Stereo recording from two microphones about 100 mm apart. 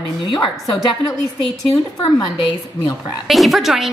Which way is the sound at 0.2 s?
55° left (ahead or behind).